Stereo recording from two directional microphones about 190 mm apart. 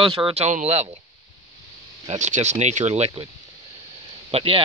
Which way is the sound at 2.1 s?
40° right (ahead or behind).